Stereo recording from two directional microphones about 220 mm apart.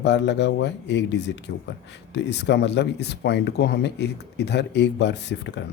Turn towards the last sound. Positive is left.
turn(degrees=50)  # may be behind; listen again after turning